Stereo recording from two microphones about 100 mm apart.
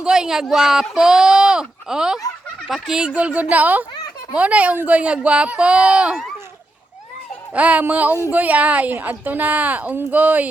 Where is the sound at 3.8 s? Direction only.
45° left (ahead or behind).